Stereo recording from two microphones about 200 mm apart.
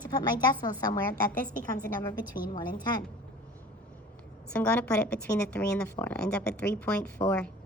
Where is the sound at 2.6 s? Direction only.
20° left (ahead or behind).